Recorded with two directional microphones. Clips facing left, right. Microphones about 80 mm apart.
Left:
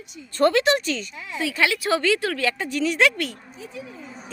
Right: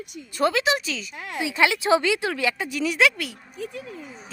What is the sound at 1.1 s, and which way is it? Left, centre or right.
Speech, right.